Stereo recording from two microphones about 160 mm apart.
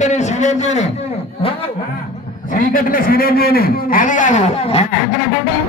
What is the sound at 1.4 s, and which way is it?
Speech, 35° left (ahead or behind).